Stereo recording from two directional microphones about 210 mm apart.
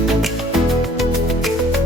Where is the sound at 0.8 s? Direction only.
Centre (ahead or behind).